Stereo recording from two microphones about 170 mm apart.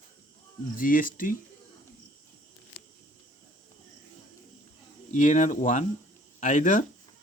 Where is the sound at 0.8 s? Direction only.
55° left (ahead or behind).